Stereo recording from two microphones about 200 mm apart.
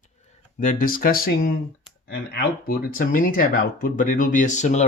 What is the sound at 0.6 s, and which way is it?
Speech, 40° left (ahead or behind).